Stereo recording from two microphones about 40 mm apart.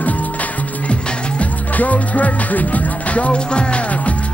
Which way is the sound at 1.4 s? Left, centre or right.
Left.